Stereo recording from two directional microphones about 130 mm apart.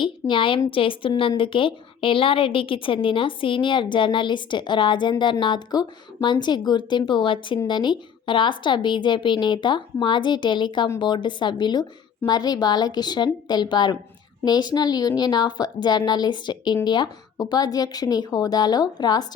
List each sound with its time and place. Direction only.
0.0 s a woman's voice: 40° left (ahead or behind)